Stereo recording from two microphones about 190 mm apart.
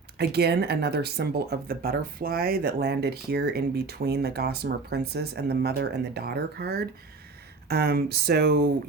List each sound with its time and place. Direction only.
0.2 s speech: 60° right (ahead or behind)